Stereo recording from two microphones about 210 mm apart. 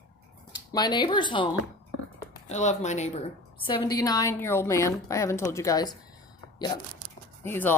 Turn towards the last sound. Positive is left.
turn(degrees=10)  # may be behind; listen again after turning